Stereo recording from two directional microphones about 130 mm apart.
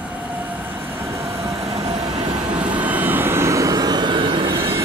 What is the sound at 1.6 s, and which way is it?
Vehicle, 50° right (ahead or behind).